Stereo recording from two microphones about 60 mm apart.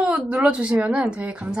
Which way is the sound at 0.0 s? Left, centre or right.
Right.